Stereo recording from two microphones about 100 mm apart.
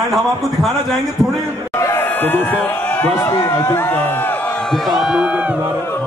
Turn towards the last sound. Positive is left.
turn(degrees=-5)  # may be behind; listen again after turning